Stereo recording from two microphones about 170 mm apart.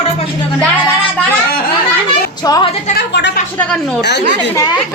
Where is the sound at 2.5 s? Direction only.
20° left (ahead or behind).